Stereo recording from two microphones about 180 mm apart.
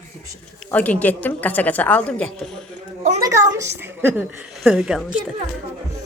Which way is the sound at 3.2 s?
20° right (ahead or behind).